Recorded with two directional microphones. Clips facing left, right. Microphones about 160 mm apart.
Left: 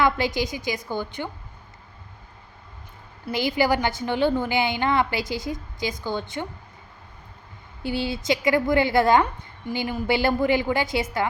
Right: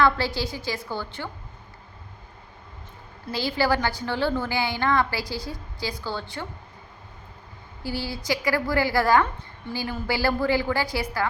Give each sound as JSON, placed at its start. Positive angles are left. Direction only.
{"t": 0.0, "sound": "a woman's voice", "side_deg": 20}
{"t": 3.2, "sound": "speech", "side_deg": 15}
{"t": 7.8, "sound": "speech", "side_deg": 20}